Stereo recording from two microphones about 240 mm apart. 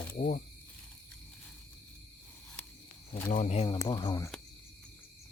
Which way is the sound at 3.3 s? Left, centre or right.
Left.